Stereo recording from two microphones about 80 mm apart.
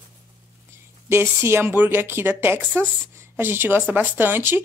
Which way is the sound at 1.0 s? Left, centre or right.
Right.